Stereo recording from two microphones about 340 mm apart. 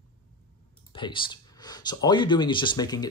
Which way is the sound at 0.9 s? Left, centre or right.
Centre.